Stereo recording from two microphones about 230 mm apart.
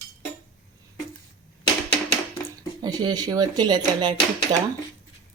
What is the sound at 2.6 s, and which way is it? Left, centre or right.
Speech, centre.